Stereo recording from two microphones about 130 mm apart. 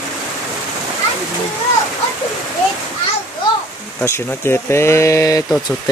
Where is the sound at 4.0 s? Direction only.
20° left (ahead or behind).